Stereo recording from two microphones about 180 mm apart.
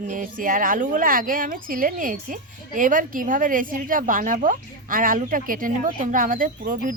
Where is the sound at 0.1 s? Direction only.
50° right (ahead or behind).